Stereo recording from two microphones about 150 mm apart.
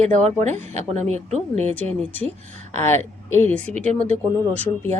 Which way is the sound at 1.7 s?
10° left (ahead or behind).